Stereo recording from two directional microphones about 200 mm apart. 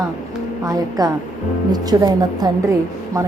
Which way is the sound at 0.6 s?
20° right (ahead or behind).